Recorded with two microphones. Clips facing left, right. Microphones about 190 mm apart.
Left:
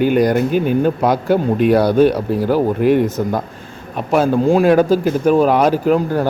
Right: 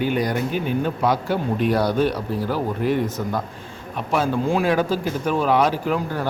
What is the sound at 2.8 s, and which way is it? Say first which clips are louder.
Speech: left 7 dB; 70° left (ahead or behind).